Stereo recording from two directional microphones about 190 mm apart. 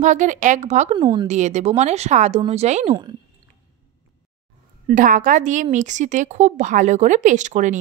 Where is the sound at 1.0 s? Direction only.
25° right (ahead or behind).